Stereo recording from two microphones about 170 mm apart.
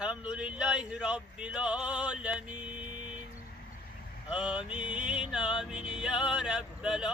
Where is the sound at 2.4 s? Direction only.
45° right (ahead or behind).